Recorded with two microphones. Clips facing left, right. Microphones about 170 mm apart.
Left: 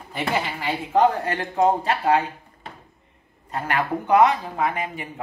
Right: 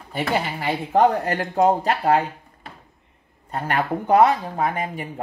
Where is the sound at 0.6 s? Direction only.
45° right (ahead or behind).